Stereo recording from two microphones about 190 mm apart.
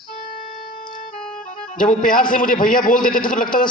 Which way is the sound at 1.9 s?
45° left (ahead or behind).